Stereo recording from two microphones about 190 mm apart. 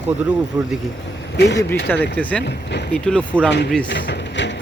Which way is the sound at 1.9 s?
10° left (ahead or behind).